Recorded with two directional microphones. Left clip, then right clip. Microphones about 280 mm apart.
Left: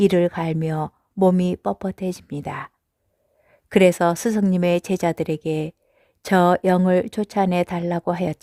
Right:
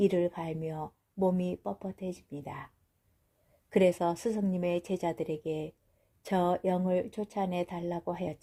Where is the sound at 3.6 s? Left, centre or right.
Left.